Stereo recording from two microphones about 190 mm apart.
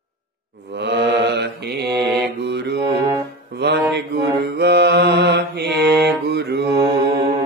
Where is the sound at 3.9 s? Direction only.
60° right (ahead or behind).